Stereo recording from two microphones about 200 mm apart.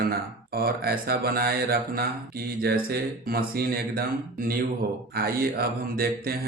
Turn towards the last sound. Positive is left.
turn(degrees=-50)  # may be behind; listen again after turning